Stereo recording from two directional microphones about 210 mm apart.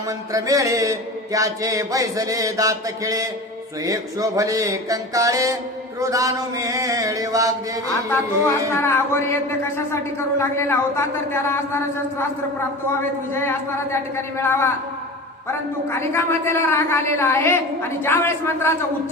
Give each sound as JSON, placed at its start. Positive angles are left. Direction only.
{"t": 0.3, "sound": "mantra", "side_deg": -15}
{"t": 8.4, "sound": "speech", "side_deg": 10}
{"t": 13.3, "sound": "speech", "side_deg": 10}
{"t": 15.9, "sound": "speech", "side_deg": 10}